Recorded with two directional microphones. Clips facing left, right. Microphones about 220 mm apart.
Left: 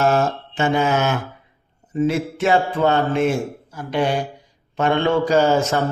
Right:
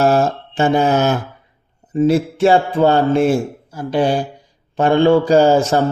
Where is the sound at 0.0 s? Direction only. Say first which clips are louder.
Right 4 dB; 35° right (ahead or behind).